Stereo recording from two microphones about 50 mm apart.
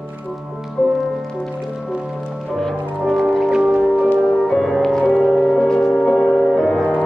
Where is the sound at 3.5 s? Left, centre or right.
Centre.